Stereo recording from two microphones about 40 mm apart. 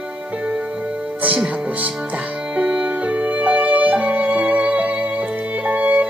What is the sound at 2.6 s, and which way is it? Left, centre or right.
Music, right.